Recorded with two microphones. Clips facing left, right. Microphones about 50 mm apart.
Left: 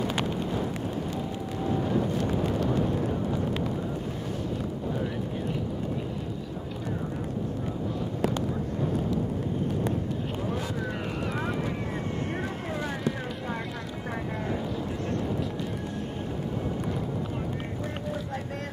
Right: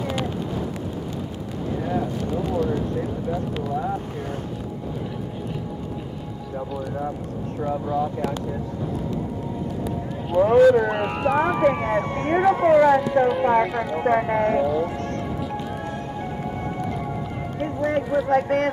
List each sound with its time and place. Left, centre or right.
10.3 s speech: right
17.8 s speech: right